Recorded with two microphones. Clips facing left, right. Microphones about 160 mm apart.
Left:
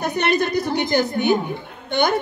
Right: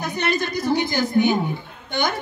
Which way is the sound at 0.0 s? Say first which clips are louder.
Left 4 dB; 60° left (ahead or behind).